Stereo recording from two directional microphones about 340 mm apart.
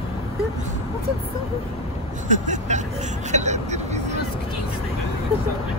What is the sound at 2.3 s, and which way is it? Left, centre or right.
Vehicle, right.